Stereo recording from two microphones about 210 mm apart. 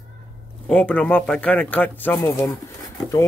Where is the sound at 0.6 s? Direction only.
5° left (ahead or behind).